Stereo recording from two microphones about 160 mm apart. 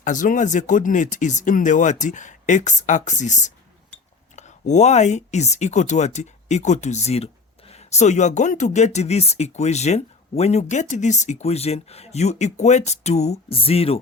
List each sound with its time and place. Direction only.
0.0 s speech: 55° left (ahead or behind); by 14.0 s 35° left (ahead or behind)